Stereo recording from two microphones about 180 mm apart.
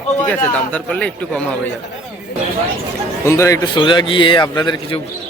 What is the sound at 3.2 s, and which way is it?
A man's voice, 15° left (ahead or behind).